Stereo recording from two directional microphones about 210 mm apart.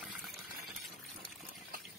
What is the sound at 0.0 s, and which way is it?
Stir, centre (ahead or behind).